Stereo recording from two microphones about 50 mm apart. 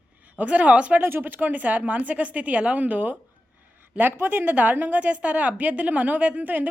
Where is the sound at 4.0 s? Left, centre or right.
Right.